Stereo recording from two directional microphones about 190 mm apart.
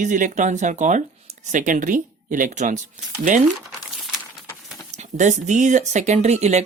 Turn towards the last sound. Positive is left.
turn(degrees=-35)  # may be behind; listen again after turning